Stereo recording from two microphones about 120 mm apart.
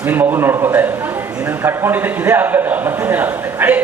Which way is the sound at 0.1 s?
15° right (ahead or behind).